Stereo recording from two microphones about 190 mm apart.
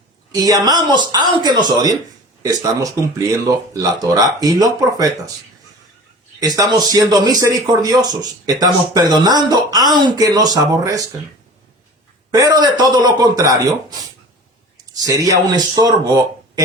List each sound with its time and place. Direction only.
0.3 s speech: 20° right (ahead or behind)
6.4 s speech: 20° right (ahead or behind)
12.3 s speech: 20° right (ahead or behind)
15.0 s speech: 20° right (ahead or behind)